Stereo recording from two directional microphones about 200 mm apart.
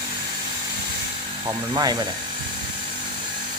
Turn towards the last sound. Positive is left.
turn(degrees=-20)  # may be behind; listen again after turning